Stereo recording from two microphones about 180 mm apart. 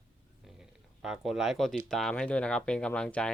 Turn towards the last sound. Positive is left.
turn(degrees=5)  # may be behind; listen again after turning